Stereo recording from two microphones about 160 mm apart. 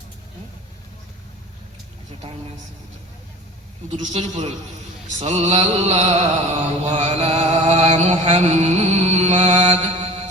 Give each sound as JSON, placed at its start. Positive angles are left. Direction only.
{"t": 3.8, "sound": "mantra", "side_deg": -50}